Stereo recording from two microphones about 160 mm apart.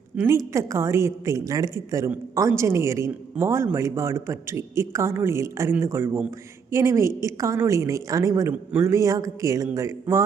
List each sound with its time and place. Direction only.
0.2 s a woman's voice: 20° right (ahead or behind)